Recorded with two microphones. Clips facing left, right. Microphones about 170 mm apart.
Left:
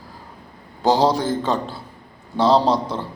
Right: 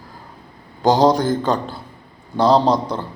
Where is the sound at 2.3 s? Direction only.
5° left (ahead or behind).